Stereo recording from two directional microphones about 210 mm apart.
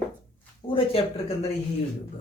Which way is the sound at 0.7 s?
25° left (ahead or behind).